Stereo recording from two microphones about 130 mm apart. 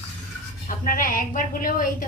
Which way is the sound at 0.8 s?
90° left.